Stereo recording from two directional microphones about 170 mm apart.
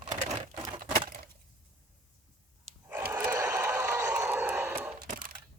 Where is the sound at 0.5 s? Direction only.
25° right (ahead or behind).